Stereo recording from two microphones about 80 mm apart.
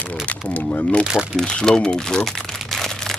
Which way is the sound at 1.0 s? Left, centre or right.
Centre.